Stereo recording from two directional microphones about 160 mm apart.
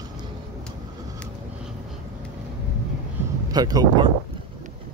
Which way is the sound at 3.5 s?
25° right (ahead or behind).